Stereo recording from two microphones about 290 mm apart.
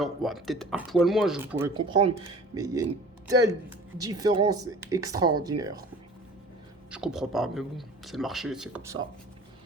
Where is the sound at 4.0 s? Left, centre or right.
Centre.